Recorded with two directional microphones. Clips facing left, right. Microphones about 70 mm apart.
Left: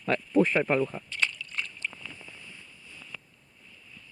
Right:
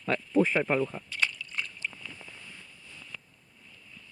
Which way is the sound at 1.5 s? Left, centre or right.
Right.